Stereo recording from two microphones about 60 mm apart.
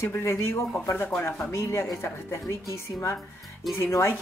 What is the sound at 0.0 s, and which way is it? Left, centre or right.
Speech, left.